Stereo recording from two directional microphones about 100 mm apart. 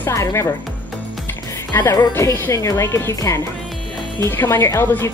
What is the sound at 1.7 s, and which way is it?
A woman's voice, 25° left (ahead or behind).